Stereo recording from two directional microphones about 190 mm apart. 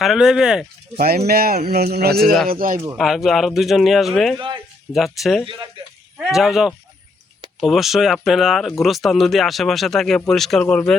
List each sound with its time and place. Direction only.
0.0 s speech: centre (ahead or behind)
0.9 s speech: 55° right (ahead or behind)
3.0 s speech: centre (ahead or behind)
4.4 s speech: 25° right (ahead or behind)
4.9 s speech: centre (ahead or behind)
5.5 s speech: 25° right (ahead or behind)
6.1 s speech: centre (ahead or behind)